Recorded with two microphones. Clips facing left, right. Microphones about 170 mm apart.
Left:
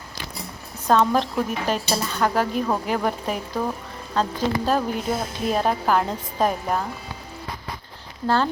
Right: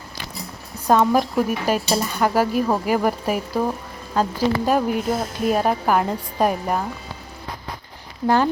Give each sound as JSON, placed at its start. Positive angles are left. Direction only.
{"t": 0.9, "sound": "speech", "side_deg": -10}